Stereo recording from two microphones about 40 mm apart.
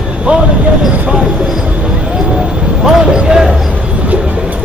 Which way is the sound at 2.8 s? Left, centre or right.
Centre.